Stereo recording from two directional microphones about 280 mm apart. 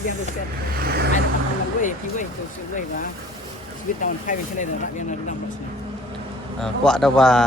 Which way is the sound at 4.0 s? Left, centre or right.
Left.